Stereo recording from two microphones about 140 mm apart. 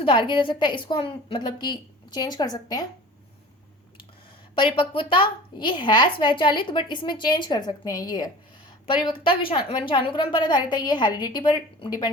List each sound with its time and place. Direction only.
0.0 s a woman's voice: 35° left (ahead or behind)
4.5 s a woman's voice: 35° left (ahead or behind)